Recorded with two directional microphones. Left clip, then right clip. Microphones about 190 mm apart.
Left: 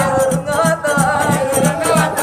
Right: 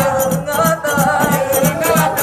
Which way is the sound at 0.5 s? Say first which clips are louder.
Right 2 dB; 10° left (ahead or behind).